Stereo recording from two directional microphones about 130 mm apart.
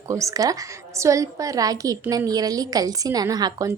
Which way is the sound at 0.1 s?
25° right (ahead or behind).